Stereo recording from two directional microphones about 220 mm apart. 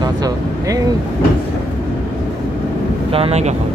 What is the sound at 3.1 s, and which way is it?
Vehicle, 30° right (ahead or behind).